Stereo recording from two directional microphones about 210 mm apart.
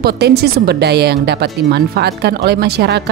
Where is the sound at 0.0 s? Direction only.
50° right (ahead or behind).